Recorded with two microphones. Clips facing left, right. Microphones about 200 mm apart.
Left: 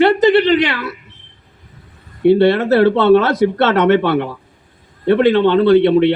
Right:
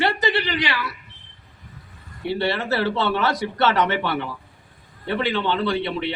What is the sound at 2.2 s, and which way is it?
A man's voice, 55° left (ahead or behind).